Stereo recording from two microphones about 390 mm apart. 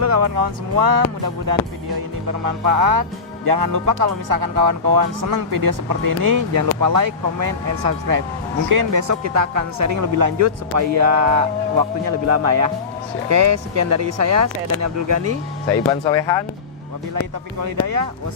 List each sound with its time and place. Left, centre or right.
0.0 s speech: right
15.7 s speech: centre
17.6 s speech: right